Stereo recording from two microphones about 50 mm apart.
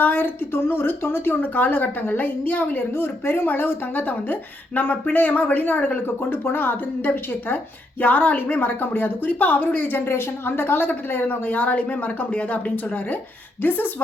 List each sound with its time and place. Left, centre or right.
0.0 s a woman's voice: left
6.3 s a woman's voice: left
10.1 s a woman's voice: left